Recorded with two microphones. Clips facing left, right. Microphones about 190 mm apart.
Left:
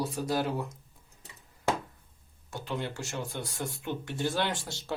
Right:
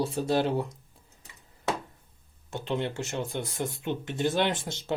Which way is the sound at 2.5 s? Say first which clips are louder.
Right 5 dB; 25° right (ahead or behind).